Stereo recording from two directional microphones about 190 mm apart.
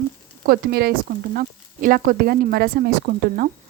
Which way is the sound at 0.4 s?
55° right (ahead or behind).